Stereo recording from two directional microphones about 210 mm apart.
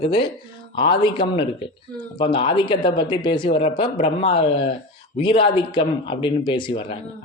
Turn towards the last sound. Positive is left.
turn(degrees=25)  # may be behind; listen again after turning